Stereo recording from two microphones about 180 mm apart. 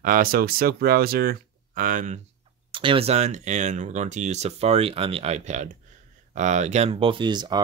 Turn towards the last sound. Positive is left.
turn(degrees=-25)  # may be behind; listen again after turning